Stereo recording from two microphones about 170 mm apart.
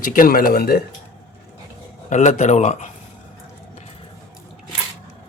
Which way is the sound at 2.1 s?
45° left (ahead or behind).